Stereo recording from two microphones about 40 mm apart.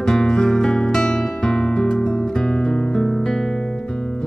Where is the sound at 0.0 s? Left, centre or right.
Centre.